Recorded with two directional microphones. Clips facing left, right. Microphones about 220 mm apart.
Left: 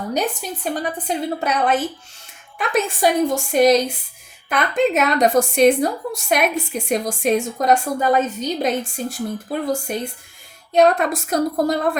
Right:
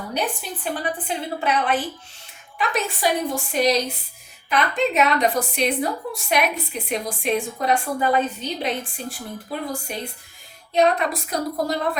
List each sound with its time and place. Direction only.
0.1 s a woman's voice: 40° left (ahead or behind)
10.8 s a woman's voice: 45° left (ahead or behind)